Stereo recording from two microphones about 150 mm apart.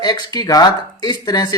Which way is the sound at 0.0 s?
30° left (ahead or behind).